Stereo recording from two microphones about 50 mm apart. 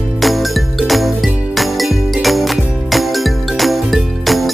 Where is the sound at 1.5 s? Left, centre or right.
Centre.